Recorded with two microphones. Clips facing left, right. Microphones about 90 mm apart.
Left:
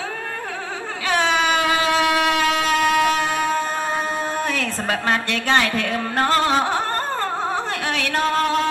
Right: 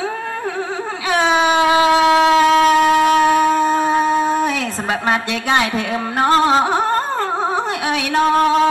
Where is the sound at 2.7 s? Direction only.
20° right (ahead or behind).